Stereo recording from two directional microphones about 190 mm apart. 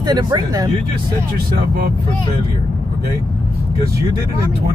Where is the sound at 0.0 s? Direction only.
20° right (ahead or behind).